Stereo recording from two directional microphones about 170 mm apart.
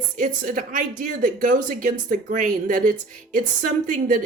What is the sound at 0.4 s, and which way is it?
Speech, 55° right (ahead or behind).